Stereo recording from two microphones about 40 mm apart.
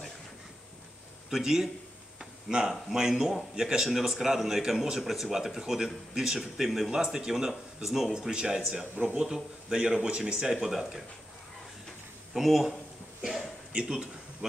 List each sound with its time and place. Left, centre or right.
1.3 s a man's voice: centre
2.9 s a man's voice: centre
6.9 s a man's voice: centre
9.3 s speech: centre
10.5 s a man's voice: centre
12.4 s speech: centre
13.2 s a sound: centre